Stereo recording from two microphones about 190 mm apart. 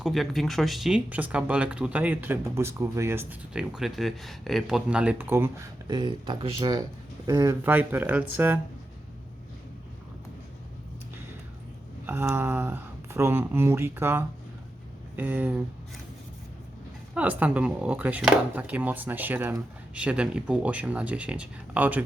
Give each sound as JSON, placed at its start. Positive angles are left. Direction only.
{"t": 0.0, "sound": "speech", "side_deg": 0}
{"t": 5.9, "sound": "speech", "side_deg": -25}
{"t": 12.0, "sound": "speech", "side_deg": -10}
{"t": 17.2, "sound": "speech", "side_deg": -10}